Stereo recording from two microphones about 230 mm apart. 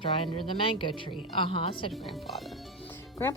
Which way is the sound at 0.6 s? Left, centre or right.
Left.